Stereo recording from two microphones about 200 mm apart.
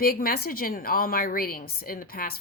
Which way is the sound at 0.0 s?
45° left (ahead or behind).